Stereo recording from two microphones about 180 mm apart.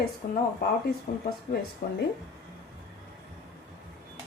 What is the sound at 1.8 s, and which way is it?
Speech, 55° left (ahead or behind).